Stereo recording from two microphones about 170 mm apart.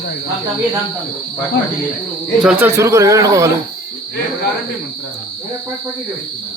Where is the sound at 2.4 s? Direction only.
15° right (ahead or behind).